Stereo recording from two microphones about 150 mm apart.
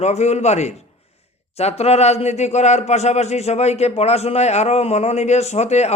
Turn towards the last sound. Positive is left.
turn(degrees=45)  # may be behind; listen again after turning